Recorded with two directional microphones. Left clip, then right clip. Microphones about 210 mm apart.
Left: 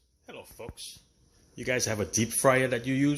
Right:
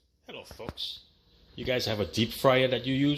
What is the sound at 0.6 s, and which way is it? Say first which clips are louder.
Speech: right 6 dB; 5° left (ahead or behind).